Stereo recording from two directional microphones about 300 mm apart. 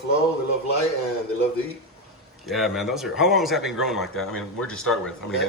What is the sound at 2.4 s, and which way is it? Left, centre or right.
Speech, centre.